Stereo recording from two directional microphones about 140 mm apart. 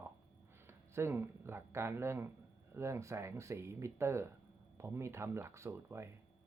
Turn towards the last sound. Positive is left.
turn(degrees=-20)  # may be behind; listen again after turning